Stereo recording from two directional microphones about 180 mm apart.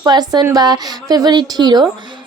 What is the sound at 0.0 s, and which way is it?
Speech, 20° right (ahead or behind).